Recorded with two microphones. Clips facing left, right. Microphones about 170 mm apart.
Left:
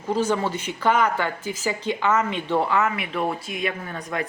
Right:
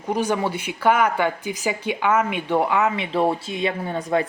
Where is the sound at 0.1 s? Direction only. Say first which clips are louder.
Even; 15° right (ahead or behind).